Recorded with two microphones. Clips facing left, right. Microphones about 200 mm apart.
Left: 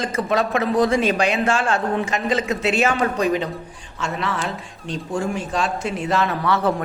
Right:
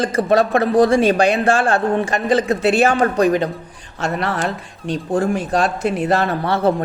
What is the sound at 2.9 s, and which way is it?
Speech, 45° right (ahead or behind).